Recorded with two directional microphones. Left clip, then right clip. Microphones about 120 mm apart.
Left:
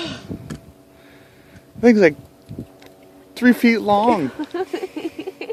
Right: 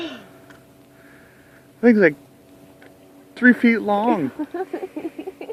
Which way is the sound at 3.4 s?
20° left (ahead or behind).